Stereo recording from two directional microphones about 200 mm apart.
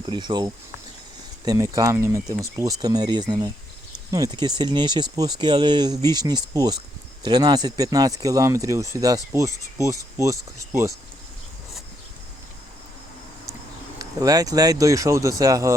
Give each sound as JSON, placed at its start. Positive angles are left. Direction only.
{"t": 0.0, "sound": "speech", "side_deg": -25}
{"t": 14.0, "sound": "speech", "side_deg": -20}